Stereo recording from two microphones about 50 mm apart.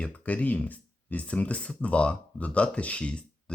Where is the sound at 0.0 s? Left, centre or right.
Left.